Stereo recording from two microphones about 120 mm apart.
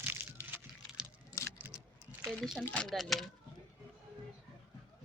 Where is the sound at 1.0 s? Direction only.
5° right (ahead or behind).